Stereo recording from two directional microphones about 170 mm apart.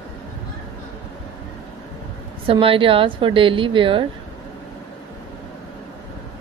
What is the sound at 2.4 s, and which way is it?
A woman's voice, 30° right (ahead or behind).